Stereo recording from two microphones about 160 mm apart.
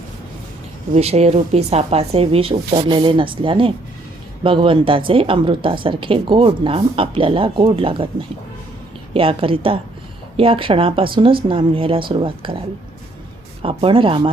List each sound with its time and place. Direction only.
0.9 s a woman's voice: 40° right (ahead or behind)
9.1 s a woman's voice: 35° right (ahead or behind)
13.6 s a woman's voice: 35° right (ahead or behind)